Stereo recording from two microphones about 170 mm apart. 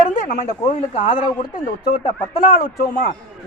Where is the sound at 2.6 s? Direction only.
60° left (ahead or behind).